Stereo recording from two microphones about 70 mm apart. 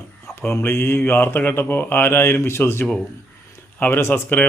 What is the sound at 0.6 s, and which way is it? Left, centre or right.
Speech, left.